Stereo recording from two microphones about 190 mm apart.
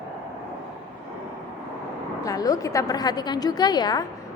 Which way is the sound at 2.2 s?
20° left (ahead or behind).